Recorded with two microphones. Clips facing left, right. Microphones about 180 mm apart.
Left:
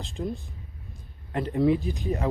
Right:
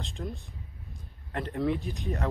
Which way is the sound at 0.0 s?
Centre (ahead or behind).